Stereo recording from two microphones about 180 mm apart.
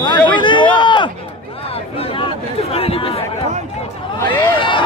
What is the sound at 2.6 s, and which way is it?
Chatter, 35° left (ahead or behind).